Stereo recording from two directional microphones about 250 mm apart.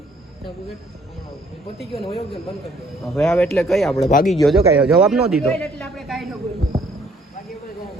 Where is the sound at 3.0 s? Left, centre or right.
Centre.